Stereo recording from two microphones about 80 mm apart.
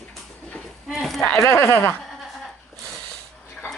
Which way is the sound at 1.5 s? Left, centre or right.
Left.